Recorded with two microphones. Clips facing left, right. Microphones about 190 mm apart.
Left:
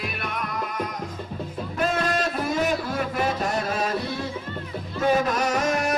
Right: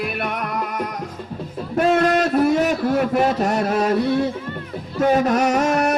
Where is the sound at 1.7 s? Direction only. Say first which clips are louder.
Right 8 dB; 65° right (ahead or behind).